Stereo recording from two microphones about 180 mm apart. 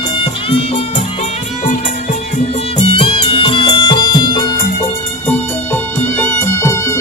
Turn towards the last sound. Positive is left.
turn(degrees=15)  # may be behind; listen again after turning